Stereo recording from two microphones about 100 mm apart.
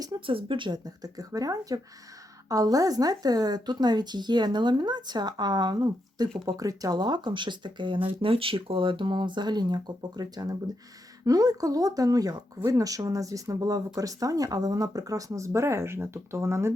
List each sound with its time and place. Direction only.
0.3 s a woman's voice: 60° right (ahead or behind)
8.2 s a woman's voice: 65° right (ahead or behind); by 16.7 s 25° right (ahead or behind)